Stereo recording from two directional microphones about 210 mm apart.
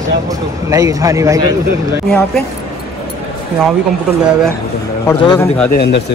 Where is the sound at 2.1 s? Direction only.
5° left (ahead or behind).